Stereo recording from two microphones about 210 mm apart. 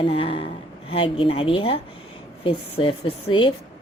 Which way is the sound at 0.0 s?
25° left (ahead or behind).